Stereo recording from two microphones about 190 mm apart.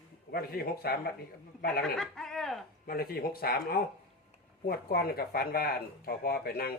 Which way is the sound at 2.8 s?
55° left (ahead or behind).